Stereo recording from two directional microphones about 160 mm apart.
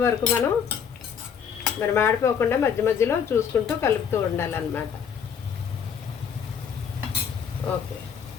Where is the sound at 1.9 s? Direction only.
15° left (ahead or behind).